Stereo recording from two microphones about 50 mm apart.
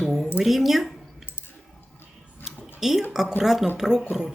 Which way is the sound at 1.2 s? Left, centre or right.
Left.